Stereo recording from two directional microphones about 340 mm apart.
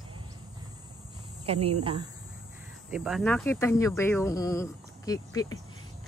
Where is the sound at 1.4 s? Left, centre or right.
Centre.